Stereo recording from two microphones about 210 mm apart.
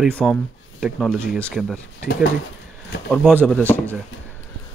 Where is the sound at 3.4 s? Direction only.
5° left (ahead or behind).